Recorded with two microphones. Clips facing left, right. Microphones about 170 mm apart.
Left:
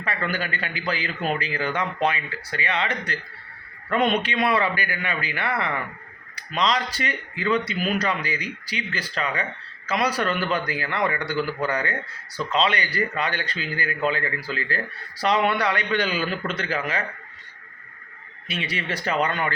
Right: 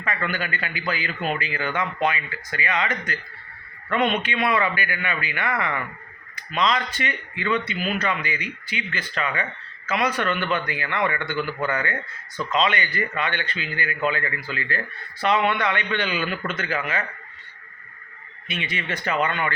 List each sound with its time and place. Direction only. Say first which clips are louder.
0.0 s speech: even; 35° left (ahead or behind)
18.4 s speech: left 1 dB; 40° left (ahead or behind)